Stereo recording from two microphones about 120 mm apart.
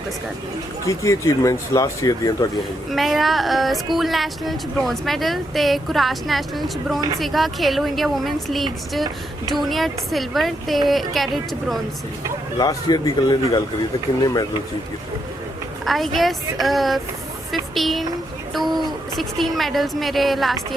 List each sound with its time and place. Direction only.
0.9 s speech: 25° left (ahead or behind)
2.9 s speech: centre (ahead or behind)
12.5 s a man's voice: 35° left (ahead or behind)
15.9 s speech: centre (ahead or behind)
19.1 s speech: centre (ahead or behind)